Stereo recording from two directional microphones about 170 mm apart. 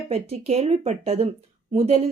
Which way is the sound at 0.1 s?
40° right (ahead or behind).